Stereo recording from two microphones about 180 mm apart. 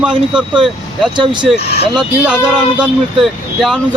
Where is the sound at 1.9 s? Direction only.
5° right (ahead or behind).